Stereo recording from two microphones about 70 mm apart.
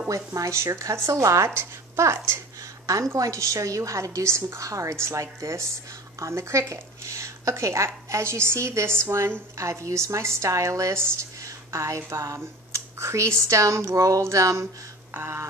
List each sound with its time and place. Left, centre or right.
0.1 s a woman's voice: right
2.9 s a woman's voice: right
15.1 s a sound: right